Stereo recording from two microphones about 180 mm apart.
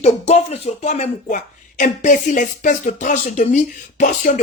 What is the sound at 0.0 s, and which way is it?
Speech, 35° left (ahead or behind).